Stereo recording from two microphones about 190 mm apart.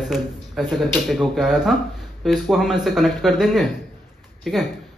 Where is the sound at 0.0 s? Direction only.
Centre (ahead or behind).